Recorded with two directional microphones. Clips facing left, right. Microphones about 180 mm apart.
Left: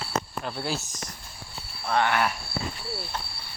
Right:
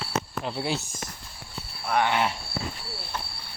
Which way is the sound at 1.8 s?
15° right (ahead or behind).